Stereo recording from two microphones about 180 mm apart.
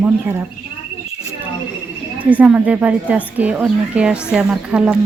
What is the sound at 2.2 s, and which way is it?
A woman's voice, 10° right (ahead or behind).